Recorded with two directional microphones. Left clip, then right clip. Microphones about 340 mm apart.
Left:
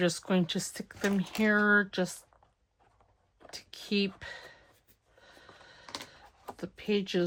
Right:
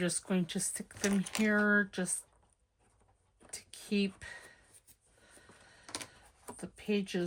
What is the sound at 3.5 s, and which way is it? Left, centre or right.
Speech, centre.